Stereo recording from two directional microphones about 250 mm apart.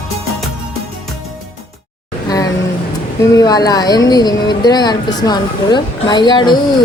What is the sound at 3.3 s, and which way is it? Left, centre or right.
Speech, centre.